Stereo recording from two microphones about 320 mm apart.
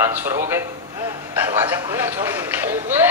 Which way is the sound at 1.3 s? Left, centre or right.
Centre.